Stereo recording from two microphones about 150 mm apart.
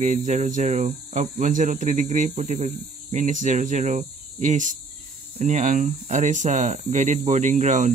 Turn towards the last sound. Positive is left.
turn(degrees=-55)  # may be behind; listen again after turning